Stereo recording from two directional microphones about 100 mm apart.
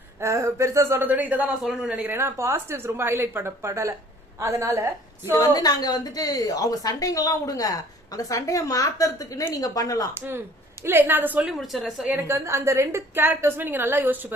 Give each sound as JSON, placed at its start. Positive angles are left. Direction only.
{"t": 0.2, "sound": "speech", "side_deg": -30}
{"t": 2.0, "sound": "a woman's voice", "side_deg": -25}
{"t": 5.3, "sound": "a woman's voice", "side_deg": 35}
{"t": 10.2, "sound": "a woman's voice", "side_deg": -25}
{"t": 11.4, "sound": "speech", "side_deg": 0}
{"t": 12.1, "sound": "a woman's voice", "side_deg": -25}